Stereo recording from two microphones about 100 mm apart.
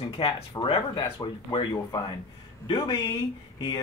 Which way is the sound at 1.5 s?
55° left (ahead or behind).